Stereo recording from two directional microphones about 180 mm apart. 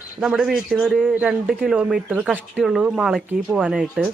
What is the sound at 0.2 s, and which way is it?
A man's voice, 5° right (ahead or behind).